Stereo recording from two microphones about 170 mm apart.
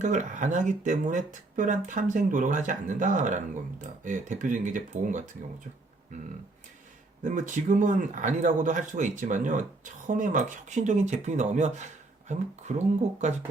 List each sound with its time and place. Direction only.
0.0 s speech: 50° right (ahead or behind)
7.2 s speech: 50° right (ahead or behind)